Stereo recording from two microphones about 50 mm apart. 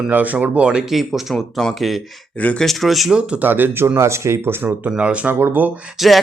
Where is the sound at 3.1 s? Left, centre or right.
Right.